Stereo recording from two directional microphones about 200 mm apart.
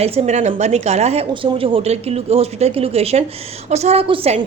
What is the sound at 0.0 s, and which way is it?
A woman's voice, 30° right (ahead or behind).